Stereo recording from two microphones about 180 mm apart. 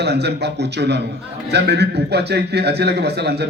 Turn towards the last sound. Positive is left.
turn(degrees=-65)  # may be behind; listen again after turning